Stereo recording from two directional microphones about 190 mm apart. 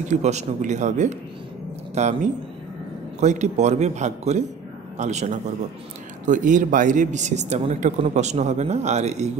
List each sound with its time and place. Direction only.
0.0 s a man's voice: 40° right (ahead or behind)